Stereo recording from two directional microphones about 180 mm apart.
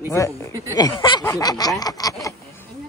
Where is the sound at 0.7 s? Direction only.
25° left (ahead or behind).